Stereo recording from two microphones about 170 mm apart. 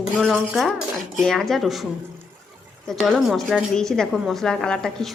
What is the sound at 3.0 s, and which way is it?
Speech, centre (ahead or behind).